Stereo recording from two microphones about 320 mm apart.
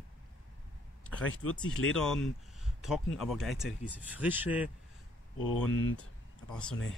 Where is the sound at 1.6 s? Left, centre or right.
Left.